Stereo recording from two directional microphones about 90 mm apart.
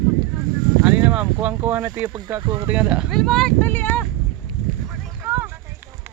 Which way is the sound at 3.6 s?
20° left (ahead or behind).